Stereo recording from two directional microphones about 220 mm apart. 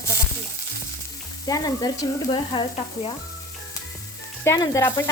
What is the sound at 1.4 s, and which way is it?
Sizzle, 15° left (ahead or behind).